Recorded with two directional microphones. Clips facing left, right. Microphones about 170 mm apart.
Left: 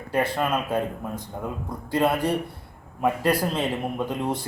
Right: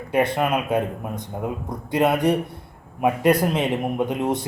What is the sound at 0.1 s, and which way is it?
A man's voice, 15° right (ahead or behind).